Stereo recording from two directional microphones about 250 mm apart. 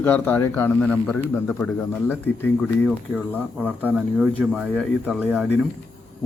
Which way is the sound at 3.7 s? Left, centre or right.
Centre.